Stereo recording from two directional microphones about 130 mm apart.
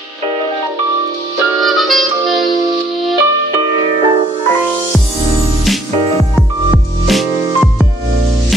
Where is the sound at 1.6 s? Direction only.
Centre (ahead or behind).